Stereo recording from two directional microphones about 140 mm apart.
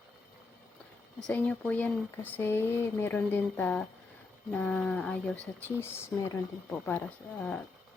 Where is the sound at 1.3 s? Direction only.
10° left (ahead or behind).